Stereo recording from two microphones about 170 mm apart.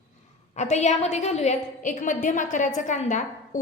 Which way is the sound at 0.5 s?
45° left (ahead or behind).